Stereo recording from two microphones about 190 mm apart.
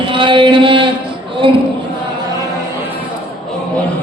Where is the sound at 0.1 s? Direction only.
25° right (ahead or behind).